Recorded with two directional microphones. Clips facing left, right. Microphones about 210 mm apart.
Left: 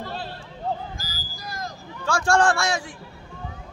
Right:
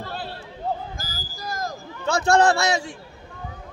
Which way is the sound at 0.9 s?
45° right (ahead or behind).